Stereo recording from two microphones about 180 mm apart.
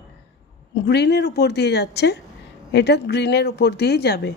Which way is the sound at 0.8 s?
70° left (ahead or behind).